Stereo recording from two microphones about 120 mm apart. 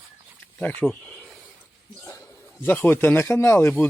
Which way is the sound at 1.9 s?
25° left (ahead or behind).